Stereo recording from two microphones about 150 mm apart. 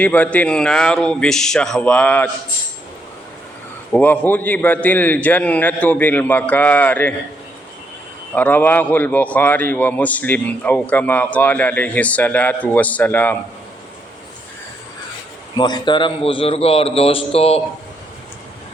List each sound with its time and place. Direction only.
0.0 s a man's voice: 10° left (ahead or behind)
3.9 s a man's voice: 10° left (ahead or behind)
8.4 s a man's voice: 10° left (ahead or behind)
15.5 s a man's voice: 30° left (ahead or behind)